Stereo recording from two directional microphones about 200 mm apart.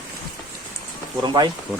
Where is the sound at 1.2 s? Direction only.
20° right (ahead or behind).